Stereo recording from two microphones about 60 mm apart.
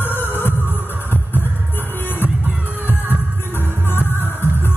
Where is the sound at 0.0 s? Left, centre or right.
Left.